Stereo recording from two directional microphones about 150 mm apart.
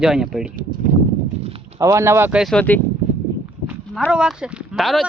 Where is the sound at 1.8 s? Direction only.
20° right (ahead or behind).